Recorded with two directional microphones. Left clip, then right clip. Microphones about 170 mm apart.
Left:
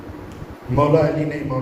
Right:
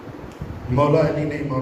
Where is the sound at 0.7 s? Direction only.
35° right (ahead or behind).